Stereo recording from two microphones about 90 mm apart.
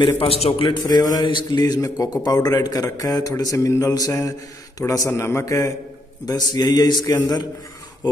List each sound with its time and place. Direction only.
0.2 s a man's voice: 80° left
0.8 s a man's voice: 40° left (ahead or behind)
1.2 s mantra: 60° left (ahead or behind)
1.6 s a man's voice: 45° left (ahead or behind)